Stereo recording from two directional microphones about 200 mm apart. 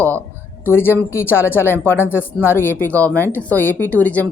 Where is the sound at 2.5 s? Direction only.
10° left (ahead or behind).